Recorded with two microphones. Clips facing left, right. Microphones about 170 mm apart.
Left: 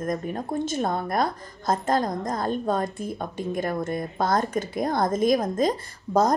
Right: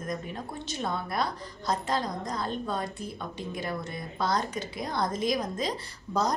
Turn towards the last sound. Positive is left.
turn(degrees=50)  # may be behind; listen again after turning